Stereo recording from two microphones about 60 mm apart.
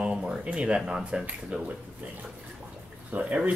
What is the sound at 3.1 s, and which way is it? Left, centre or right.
Speech, right.